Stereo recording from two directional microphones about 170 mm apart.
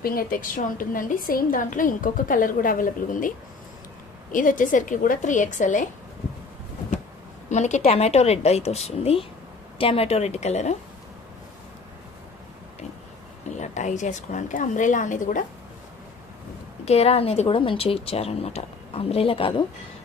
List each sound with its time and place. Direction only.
0.0 s a woman's voice: 60° left (ahead or behind)
7.4 s speech: 45° left (ahead or behind)
13.6 s a woman's voice: 45° left (ahead or behind)
16.8 s speech: 40° left (ahead or behind)